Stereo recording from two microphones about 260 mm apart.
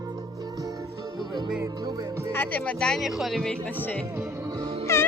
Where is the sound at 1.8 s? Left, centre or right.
Centre.